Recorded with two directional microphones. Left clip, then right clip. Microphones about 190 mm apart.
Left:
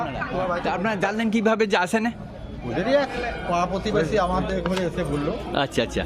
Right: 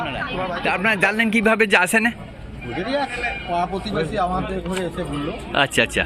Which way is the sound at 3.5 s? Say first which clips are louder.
Left 1 dB; 15° left (ahead or behind).